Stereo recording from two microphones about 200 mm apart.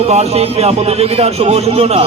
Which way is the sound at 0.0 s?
30° right (ahead or behind).